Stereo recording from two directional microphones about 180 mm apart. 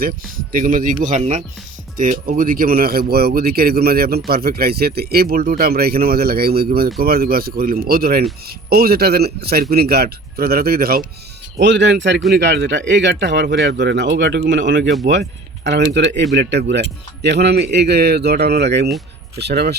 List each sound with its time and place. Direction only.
0.5 s speech: 50° right (ahead or behind)
11.5 s speech: 80° right
15.0 s speech: 75° right (ahead or behind)